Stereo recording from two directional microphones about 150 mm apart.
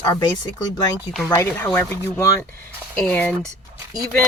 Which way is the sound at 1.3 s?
20° left (ahead or behind).